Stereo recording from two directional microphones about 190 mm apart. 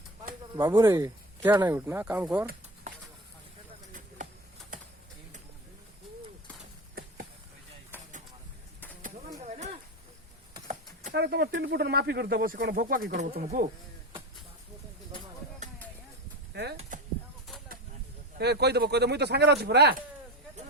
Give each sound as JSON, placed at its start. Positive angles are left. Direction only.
{"t": 0.5, "sound": "speech", "side_deg": -20}
{"t": 11.1, "sound": "speech", "side_deg": -60}
{"t": 16.5, "sound": "speech", "side_deg": -60}
{"t": 16.9, "sound": "a sound", "side_deg": -40}
{"t": 18.3, "sound": "speech", "side_deg": -60}